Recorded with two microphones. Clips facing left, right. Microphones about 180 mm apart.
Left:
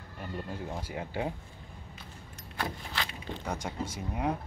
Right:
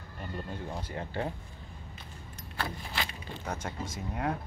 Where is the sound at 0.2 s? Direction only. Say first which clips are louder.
Left 1 dB; 10° left (ahead or behind).